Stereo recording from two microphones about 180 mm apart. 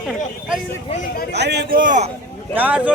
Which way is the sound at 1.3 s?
70° right (ahead or behind).